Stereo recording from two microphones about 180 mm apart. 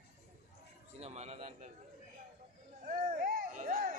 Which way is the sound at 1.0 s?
35° right (ahead or behind).